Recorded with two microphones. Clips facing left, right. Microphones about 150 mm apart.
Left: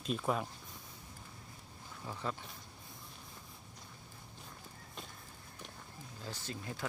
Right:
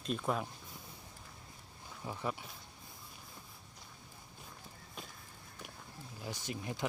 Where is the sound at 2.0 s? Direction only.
15° right (ahead or behind).